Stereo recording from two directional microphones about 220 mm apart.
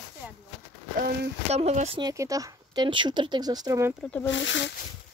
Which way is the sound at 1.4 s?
30° right (ahead or behind).